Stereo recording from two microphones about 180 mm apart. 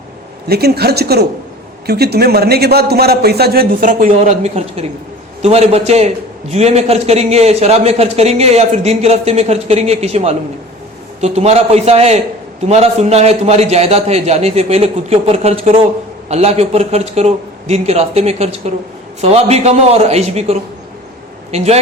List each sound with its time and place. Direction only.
0.4 s a man's voice: 60° right (ahead or behind); by 21.8 s 35° right (ahead or behind)